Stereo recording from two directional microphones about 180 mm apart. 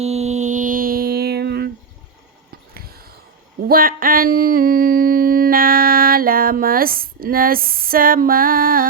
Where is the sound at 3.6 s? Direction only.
55° right (ahead or behind).